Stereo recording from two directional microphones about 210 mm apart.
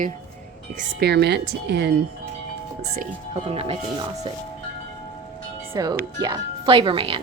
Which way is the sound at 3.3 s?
25° right (ahead or behind).